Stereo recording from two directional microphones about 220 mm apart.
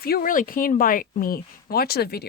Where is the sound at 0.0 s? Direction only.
40° left (ahead or behind).